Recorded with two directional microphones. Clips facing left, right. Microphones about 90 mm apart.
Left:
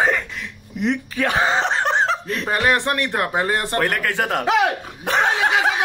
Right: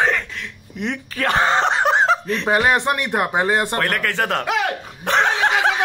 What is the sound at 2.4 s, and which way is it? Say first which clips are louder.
Speech: right 2 dB; 15° right (ahead or behind).